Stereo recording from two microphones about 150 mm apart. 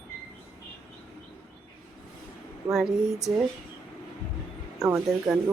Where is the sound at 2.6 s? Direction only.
10° right (ahead or behind).